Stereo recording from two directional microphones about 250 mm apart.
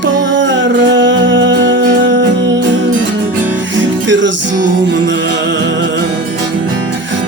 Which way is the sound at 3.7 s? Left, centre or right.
Right.